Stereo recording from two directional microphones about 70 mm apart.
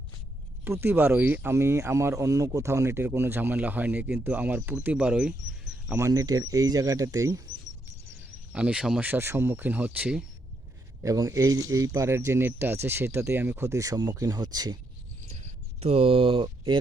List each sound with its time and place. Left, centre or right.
0.6 s speech: right
1.5 s speech: right
4.9 s speech: centre
6.0 s speech: right
6.2 s speech: right
8.5 s speech: centre
9.0 s speech: right
9.2 s speech: right
9.5 s speech: right
11.0 s speech: right
11.9 s speech: right